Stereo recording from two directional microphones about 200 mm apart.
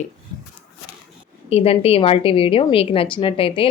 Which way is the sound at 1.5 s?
30° left (ahead or behind).